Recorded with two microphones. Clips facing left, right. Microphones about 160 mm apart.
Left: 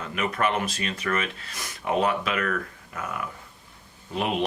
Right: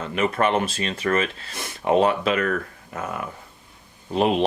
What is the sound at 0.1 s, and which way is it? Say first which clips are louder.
Speech: right 5 dB; 30° right (ahead or behind).